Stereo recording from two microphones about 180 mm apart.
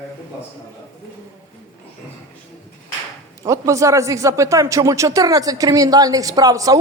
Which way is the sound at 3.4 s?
15° right (ahead or behind).